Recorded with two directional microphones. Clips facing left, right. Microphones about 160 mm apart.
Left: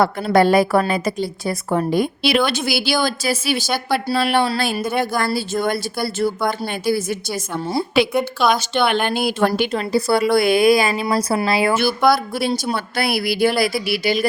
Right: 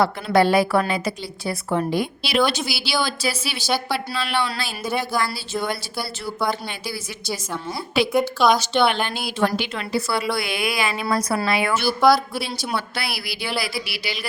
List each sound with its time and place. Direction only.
0.0 s a woman's voice: 50° left (ahead or behind)
9.6 s a woman's voice: 40° left (ahead or behind)
11.1 s a woman's voice: 30° left (ahead or behind)
12.3 s a woman's voice: 50° left (ahead or behind)